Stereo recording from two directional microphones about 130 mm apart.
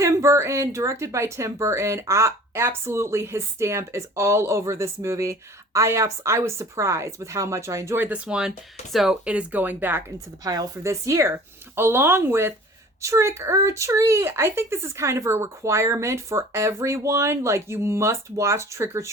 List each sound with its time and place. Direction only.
0.0 s speech: 25° right (ahead or behind)
10.4 s speech: 30° right (ahead or behind)